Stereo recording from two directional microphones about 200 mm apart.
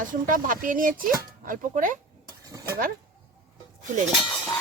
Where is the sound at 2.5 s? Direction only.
15° right (ahead or behind).